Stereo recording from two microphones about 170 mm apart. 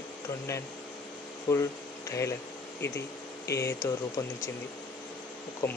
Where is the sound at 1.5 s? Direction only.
15° left (ahead or behind).